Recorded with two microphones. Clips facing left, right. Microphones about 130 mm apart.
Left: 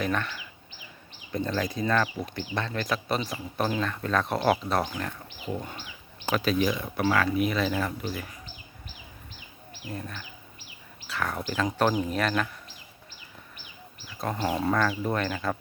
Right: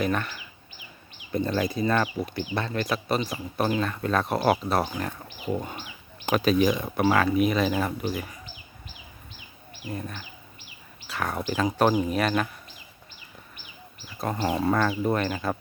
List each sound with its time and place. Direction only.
0.0 s speech: 10° right (ahead or behind)
3.2 s speech: 15° right (ahead or behind)
3.7 s speech: 5° right (ahead or behind)
11.1 s speech: 15° right (ahead or behind)
14.2 s speech: 5° right (ahead or behind)
14.7 s speech: 20° right (ahead or behind)